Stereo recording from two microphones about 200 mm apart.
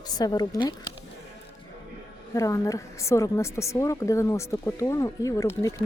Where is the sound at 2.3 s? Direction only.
15° left (ahead or behind).